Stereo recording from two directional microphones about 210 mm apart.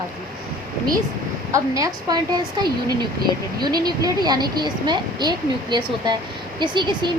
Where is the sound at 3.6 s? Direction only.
20° right (ahead or behind).